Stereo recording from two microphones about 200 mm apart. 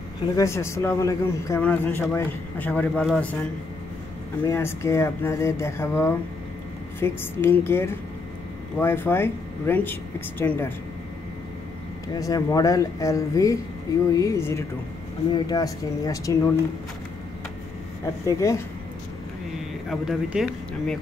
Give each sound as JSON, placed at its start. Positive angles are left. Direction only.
{"t": 0.2, "sound": "speech", "side_deg": 15}
{"t": 4.5, "sound": "speech", "side_deg": 15}
{"t": 12.1, "sound": "speech", "side_deg": 15}
{"t": 18.2, "sound": "speech", "side_deg": 15}
{"t": 19.9, "sound": "speech", "side_deg": 0}